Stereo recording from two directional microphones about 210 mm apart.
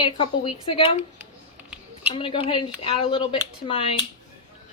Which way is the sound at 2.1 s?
25° left (ahead or behind).